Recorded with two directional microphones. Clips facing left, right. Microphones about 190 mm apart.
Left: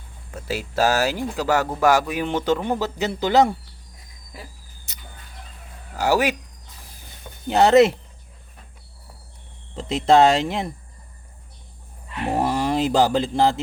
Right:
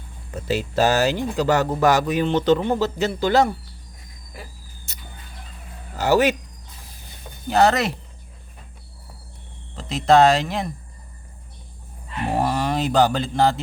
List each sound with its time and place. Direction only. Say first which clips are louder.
0.4 s speech: right 2 dB; 10° left (ahead or behind)
4.9 s a sound: right 1 dB; 15° left (ahead or behind)
6.0 s speech: right 2 dB; 10° left (ahead or behind)
7.4 s speech: left 4 dB; 25° left (ahead or behind)
9.7 s speech: even; 25° left (ahead or behind)
12.4 s speech: left 1 dB; 25° left (ahead or behind)